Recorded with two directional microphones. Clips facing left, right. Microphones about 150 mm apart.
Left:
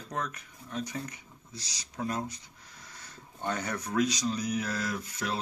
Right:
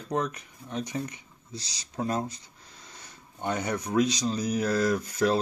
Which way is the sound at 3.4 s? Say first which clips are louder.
Right 4 dB; 15° right (ahead or behind).